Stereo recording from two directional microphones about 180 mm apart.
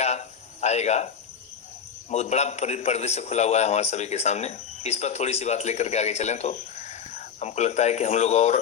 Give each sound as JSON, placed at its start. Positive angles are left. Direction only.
{"t": 0.6, "sound": "speech", "side_deg": 40}
{"t": 2.0, "sound": "a man's voice", "side_deg": 40}